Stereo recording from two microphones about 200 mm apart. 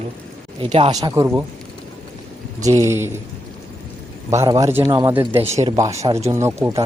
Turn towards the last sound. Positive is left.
turn(degrees=-10)  # may be behind; listen again after turning